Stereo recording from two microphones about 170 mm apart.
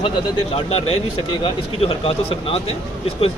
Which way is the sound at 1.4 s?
35° left (ahead or behind).